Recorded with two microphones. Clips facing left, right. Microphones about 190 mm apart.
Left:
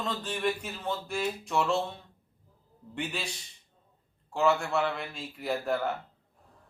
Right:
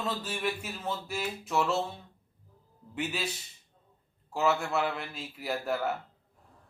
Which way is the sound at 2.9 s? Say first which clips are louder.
Right 1 dB; 5° right (ahead or behind).